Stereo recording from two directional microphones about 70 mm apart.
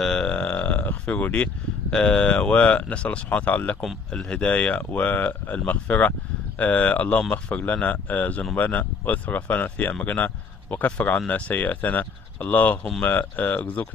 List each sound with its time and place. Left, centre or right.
0.0 s speech: centre